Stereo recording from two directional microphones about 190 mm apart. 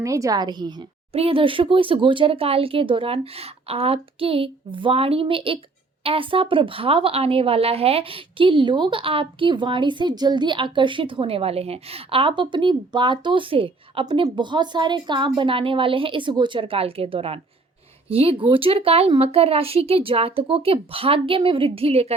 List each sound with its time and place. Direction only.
0.0 s speech: 15° right (ahead or behind); by 22.1 s 30° right (ahead or behind)